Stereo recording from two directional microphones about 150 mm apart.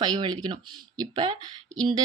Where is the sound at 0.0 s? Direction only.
30° right (ahead or behind).